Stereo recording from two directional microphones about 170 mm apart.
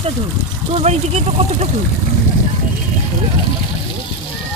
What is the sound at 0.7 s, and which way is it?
Speech, 40° right (ahead or behind).